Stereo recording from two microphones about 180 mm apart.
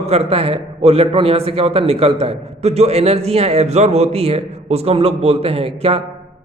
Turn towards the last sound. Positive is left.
turn(degrees=-35)  # may be behind; listen again after turning